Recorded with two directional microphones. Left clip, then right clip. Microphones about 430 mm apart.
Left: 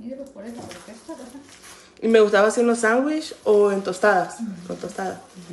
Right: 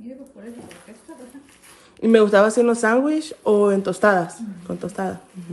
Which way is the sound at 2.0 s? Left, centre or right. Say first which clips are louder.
Right 1 dB; centre.